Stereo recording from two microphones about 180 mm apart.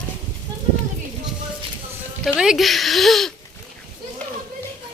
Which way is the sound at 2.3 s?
5° right (ahead or behind).